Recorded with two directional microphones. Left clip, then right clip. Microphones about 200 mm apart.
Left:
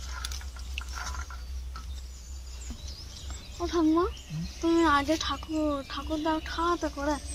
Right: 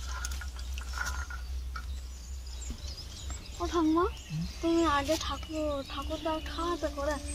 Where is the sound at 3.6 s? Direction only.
35° left (ahead or behind).